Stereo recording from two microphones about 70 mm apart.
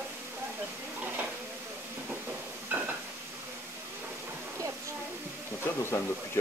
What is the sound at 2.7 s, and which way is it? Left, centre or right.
Stir, right.